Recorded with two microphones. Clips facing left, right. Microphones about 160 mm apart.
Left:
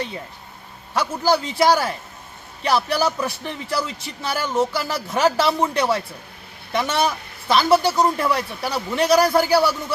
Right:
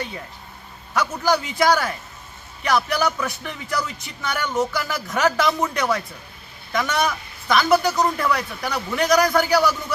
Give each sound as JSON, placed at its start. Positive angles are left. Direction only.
{"t": 1.2, "sound": "a man's voice", "side_deg": 30}